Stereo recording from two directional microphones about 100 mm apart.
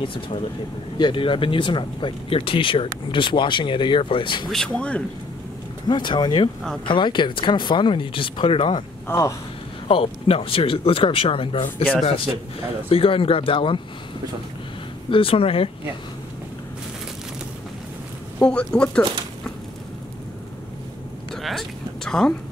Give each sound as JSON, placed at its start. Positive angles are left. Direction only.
{"t": 0.0, "sound": "speech", "side_deg": 60}
{"t": 4.5, "sound": "speech", "side_deg": 10}
{"t": 5.9, "sound": "speech", "side_deg": 50}
{"t": 9.0, "sound": "speech", "side_deg": 30}
{"t": 9.8, "sound": "speech", "side_deg": 70}
{"t": 12.9, "sound": "speech", "side_deg": 65}
{"t": 15.0, "sound": "speech", "side_deg": 65}
{"t": 18.4, "sound": "speech", "side_deg": 10}
{"t": 21.3, "sound": "a sound", "side_deg": 0}